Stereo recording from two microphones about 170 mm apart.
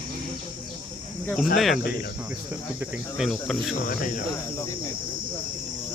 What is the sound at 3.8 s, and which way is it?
Speech, 50° left (ahead or behind).